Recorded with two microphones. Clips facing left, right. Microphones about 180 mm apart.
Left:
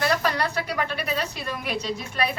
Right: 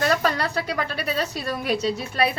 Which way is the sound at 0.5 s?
35° right (ahead or behind).